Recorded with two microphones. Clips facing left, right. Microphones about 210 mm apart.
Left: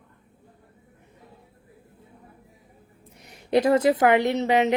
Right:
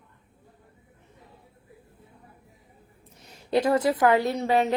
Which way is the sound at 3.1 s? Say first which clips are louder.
Left 3 dB; 15° left (ahead or behind).